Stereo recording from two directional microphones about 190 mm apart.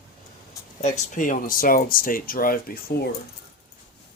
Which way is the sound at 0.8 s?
40° left (ahead or behind).